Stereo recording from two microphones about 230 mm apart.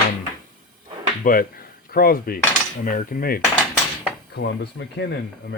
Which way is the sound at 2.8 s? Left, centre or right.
Left.